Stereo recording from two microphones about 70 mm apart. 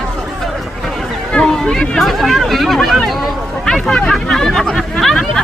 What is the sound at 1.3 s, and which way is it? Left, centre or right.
Speech, centre.